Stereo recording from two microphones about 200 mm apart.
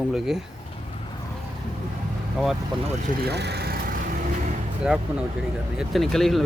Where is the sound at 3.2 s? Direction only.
55° right (ahead or behind).